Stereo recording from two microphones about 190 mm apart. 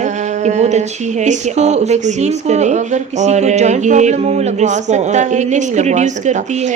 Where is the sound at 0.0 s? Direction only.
40° right (ahead or behind).